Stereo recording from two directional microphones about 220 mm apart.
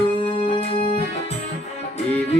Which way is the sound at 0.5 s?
20° left (ahead or behind).